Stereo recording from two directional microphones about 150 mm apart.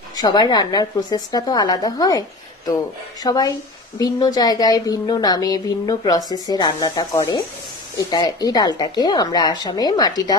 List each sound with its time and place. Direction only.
0.2 s a woman's voice: 30° left (ahead or behind)